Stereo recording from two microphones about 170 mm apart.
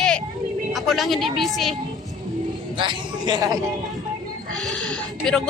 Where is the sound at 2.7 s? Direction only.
25° right (ahead or behind).